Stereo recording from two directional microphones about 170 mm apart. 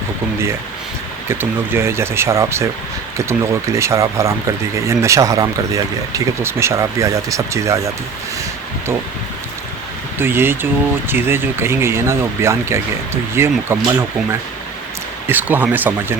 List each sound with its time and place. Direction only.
1.3 s speech: 15° right (ahead or behind)
10.2 s speech: 15° right (ahead or behind)
15.3 s speech: 10° right (ahead or behind)